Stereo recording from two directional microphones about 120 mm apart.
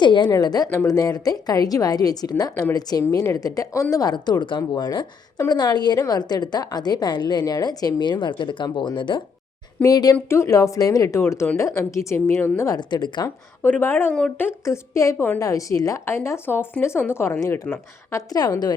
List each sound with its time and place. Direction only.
0.0 s a woman's voice: 40° left (ahead or behind)
9.8 s a woman's voice: 30° left (ahead or behind)
12.7 s a woman's voice: 40° left (ahead or behind)
13.6 s a woman's voice: 15° left (ahead or behind); by 18.7 s 35° left (ahead or behind)